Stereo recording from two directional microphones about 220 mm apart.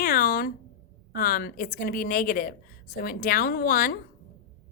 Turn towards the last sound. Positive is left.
turn(degrees=40)  # may be behind; listen again after turning